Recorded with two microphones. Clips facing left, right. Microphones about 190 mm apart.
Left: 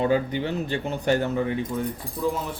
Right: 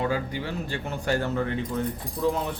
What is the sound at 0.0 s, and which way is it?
A woman's voice, 20° left (ahead or behind).